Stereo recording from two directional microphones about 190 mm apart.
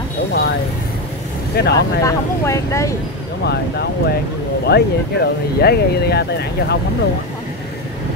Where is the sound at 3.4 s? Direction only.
60° left (ahead or behind).